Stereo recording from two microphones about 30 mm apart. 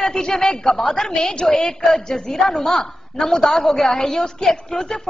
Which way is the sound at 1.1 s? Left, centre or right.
Left.